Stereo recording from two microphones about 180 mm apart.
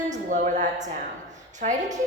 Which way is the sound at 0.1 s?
45° right (ahead or behind).